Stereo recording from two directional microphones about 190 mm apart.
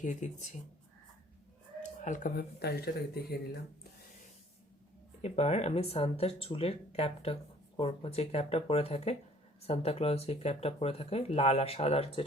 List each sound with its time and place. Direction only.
0.0 s speech: 40° left (ahead or behind)
1.8 s speech: 40° left (ahead or behind); by 3.3 s 55° left (ahead or behind)
5.2 s speech: 35° left (ahead or behind)